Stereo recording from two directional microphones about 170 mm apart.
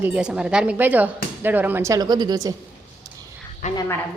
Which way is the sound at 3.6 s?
45° left (ahead or behind).